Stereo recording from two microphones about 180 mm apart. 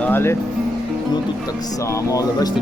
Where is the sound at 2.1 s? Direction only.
20° left (ahead or behind).